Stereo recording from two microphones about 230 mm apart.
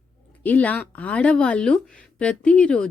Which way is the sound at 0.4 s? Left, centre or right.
Centre.